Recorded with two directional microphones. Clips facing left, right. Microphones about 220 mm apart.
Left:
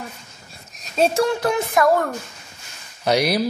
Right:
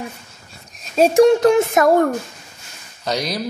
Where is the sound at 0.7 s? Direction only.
10° right (ahead or behind).